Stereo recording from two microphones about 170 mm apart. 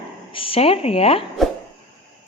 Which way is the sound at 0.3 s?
35° left (ahead or behind).